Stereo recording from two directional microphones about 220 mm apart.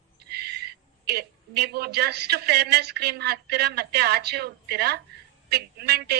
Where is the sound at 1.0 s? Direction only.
45° right (ahead or behind).